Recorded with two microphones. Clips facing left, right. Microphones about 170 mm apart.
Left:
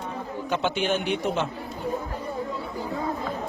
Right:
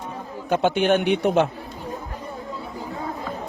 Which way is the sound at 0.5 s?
55° right (ahead or behind).